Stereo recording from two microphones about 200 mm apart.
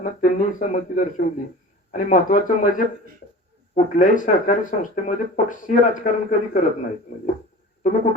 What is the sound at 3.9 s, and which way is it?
Speech, 40° left (ahead or behind).